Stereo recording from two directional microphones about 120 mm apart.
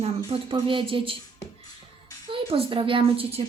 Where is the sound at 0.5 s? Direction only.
45° right (ahead or behind).